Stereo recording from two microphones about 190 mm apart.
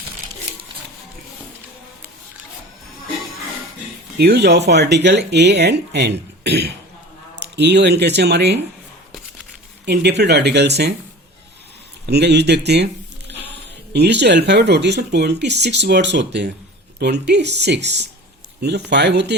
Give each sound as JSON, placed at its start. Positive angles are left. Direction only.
{"t": 4.2, "sound": "speech", "side_deg": -60}
{"t": 9.8, "sound": "speech", "side_deg": -60}
{"t": 12.0, "sound": "speech", "side_deg": -60}